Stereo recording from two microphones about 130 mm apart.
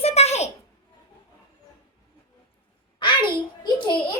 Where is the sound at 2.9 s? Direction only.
35° left (ahead or behind).